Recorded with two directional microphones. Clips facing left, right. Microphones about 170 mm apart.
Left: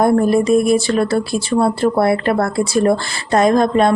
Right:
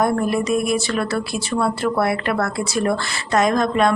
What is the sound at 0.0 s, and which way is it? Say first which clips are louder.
Speech: left 6 dB; 30° left (ahead or behind).